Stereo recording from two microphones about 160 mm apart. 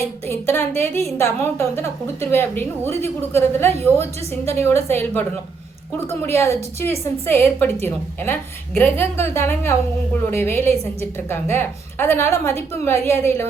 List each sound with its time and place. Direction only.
0.3 s a woman's voice: 15° left (ahead or behind)